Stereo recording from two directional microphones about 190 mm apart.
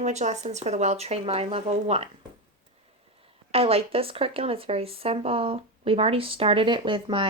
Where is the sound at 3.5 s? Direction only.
30° right (ahead or behind).